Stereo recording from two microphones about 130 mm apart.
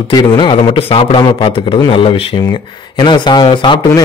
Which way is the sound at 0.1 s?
35° left (ahead or behind).